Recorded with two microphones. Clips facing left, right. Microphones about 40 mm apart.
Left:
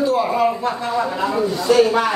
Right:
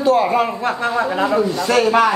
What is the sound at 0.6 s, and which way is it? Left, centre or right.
A man's voice, right.